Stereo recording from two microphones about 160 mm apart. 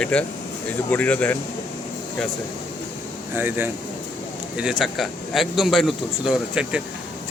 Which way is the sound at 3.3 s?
10° right (ahead or behind).